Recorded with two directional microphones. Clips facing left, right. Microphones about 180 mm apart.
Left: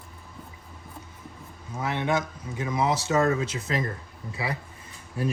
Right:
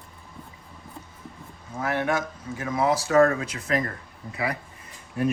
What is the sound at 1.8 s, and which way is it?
Speech, 20° left (ahead or behind).